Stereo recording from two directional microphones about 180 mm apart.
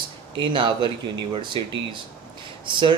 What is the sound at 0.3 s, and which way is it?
Speech, 25° right (ahead or behind).